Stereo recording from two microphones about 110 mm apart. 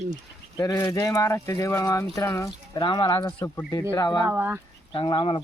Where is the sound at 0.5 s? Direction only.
30° left (ahead or behind).